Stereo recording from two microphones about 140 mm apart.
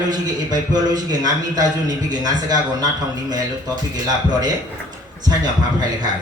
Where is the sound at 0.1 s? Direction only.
30° right (ahead or behind).